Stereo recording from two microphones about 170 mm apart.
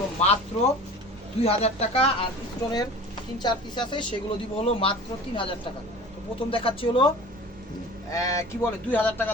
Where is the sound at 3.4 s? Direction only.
25° left (ahead or behind).